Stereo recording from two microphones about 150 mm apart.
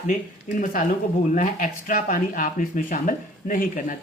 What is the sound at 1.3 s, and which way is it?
Speech, 60° left (ahead or behind).